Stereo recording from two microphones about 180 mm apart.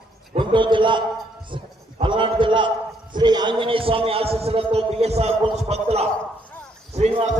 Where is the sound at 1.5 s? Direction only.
25° right (ahead or behind).